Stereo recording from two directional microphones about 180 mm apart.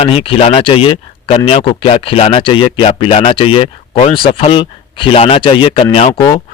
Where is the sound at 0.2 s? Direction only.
30° left (ahead or behind).